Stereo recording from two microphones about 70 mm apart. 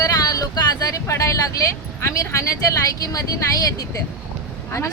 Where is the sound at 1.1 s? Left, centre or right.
Left.